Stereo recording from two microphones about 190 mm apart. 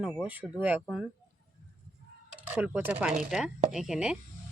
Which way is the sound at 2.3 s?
10° right (ahead or behind).